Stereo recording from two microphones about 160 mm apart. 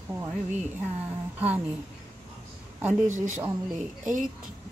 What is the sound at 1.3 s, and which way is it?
Speech, 10° right (ahead or behind).